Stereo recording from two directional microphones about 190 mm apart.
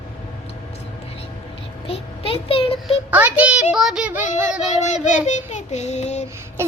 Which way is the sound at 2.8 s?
10° right (ahead or behind).